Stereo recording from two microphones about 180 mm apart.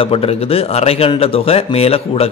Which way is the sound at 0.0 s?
30° left (ahead or behind).